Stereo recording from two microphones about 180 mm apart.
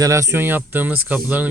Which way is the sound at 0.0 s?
15° right (ahead or behind).